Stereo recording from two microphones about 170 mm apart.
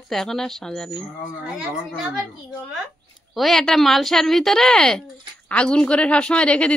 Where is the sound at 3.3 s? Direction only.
Centre (ahead or behind).